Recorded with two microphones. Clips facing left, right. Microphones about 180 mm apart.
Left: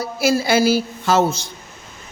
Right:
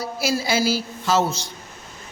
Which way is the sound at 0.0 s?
55° left (ahead or behind).